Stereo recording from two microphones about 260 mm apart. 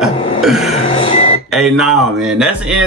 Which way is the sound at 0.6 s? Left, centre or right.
Left.